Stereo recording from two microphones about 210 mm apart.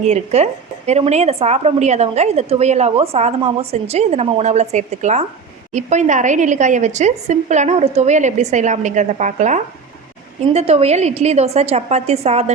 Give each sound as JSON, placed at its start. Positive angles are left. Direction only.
{"t": 0.0, "sound": "a woman's voice", "side_deg": -30}